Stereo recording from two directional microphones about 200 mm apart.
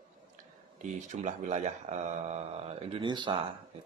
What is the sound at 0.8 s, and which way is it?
Speech, 35° right (ahead or behind).